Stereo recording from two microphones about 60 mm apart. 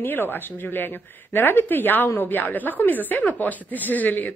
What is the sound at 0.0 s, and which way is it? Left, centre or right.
A woman's voice, left.